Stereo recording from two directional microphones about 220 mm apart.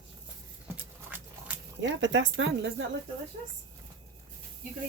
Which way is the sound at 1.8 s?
55° right (ahead or behind).